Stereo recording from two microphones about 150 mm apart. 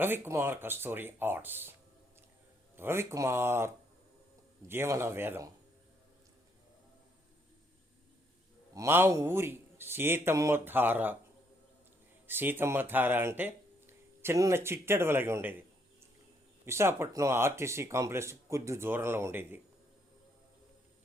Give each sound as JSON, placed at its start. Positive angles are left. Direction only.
{"t": 0.0, "sound": "speech", "side_deg": -15}
{"t": 2.7, "sound": "speech", "side_deg": -15}
{"t": 4.7, "sound": "speech", "side_deg": -15}
{"t": 8.7, "sound": "speech", "side_deg": -20}
{"t": 12.3, "sound": "speech", "side_deg": -15}
{"t": 16.6, "sound": "speech", "side_deg": -15}